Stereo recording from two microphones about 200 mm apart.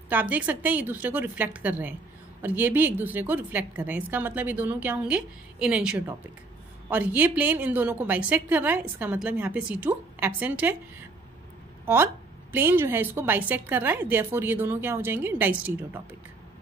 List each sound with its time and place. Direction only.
0.1 s a woman's voice: 10° right (ahead or behind)
11.8 s a woman's voice: 10° right (ahead or behind)